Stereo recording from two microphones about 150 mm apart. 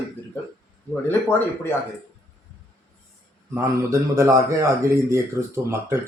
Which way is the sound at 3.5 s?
20° right (ahead or behind).